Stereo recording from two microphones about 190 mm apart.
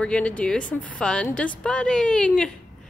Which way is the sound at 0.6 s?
45° left (ahead or behind).